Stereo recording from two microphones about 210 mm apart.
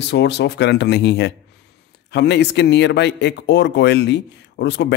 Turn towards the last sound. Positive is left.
turn(degrees=55)  # may be behind; listen again after turning